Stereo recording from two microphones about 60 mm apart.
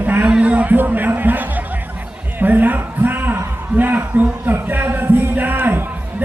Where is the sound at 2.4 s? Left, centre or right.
Right.